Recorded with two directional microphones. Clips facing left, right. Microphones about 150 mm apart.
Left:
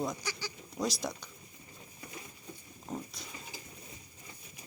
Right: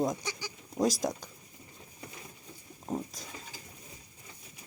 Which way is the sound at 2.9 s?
40° right (ahead or behind).